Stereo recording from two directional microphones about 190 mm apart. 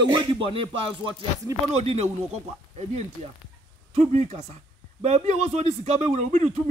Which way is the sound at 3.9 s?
35° right (ahead or behind).